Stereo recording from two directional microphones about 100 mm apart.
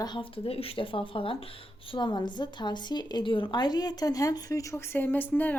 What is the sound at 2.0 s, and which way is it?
A woman's voice, 50° left (ahead or behind).